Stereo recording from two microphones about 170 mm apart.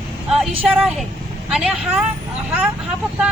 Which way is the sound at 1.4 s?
5° right (ahead or behind).